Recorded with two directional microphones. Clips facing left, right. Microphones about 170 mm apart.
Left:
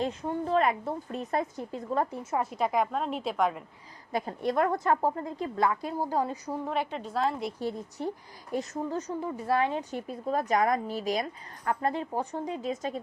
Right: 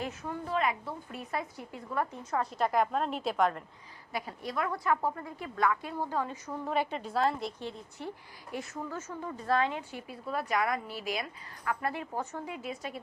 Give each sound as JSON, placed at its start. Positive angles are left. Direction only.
{"t": 0.0, "sound": "a woman's voice", "side_deg": 30}
{"t": 2.1, "sound": "speech", "side_deg": 20}
{"t": 2.5, "sound": "a woman's voice", "side_deg": 0}
{"t": 4.1, "sound": "a woman's voice", "side_deg": 50}
{"t": 5.2, "sound": "speech", "side_deg": 20}
{"t": 5.6, "sound": "a woman's voice", "side_deg": 35}
{"t": 6.7, "sound": "a woman's voice", "side_deg": 0}
{"t": 8.5, "sound": "a woman's voice", "side_deg": 40}
{"t": 9.0, "sound": "speech", "side_deg": 15}
{"t": 9.9, "sound": "a woman's voice", "side_deg": 40}
{"t": 11.8, "sound": "speech", "side_deg": 20}
{"t": 12.5, "sound": "a woman's voice", "side_deg": 35}